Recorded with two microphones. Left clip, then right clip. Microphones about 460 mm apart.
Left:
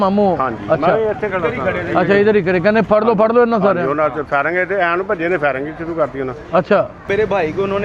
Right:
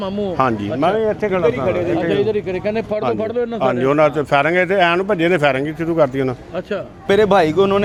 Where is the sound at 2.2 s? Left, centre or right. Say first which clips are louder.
Left 6 dB; centre.